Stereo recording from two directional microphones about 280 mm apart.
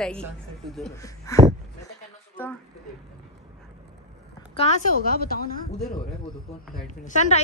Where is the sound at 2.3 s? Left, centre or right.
Centre.